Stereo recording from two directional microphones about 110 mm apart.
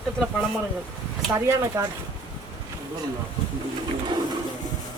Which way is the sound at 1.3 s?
25° right (ahead or behind).